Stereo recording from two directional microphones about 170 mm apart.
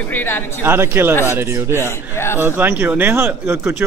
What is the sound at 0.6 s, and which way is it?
Speech, 10° right (ahead or behind).